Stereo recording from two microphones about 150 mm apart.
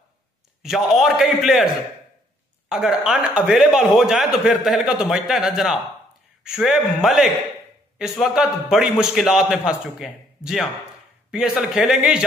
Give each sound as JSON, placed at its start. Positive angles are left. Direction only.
{"t": 0.6, "sound": "speech", "side_deg": -5}
{"t": 2.7, "sound": "speech", "side_deg": -5}